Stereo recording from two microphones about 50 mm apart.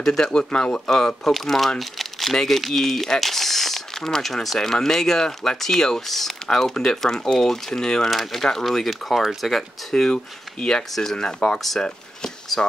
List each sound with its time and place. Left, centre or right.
0.0 s speech: centre
0.8 s speech: centre
1.8 s crumpling: centre
2.3 s speech: centre
8.1 s speech: centre
9.2 s speech: centre
9.5 s speech: centre
12.5 s speech: centre